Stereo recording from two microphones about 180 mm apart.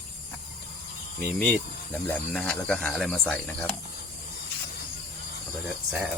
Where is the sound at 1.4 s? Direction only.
10° left (ahead or behind).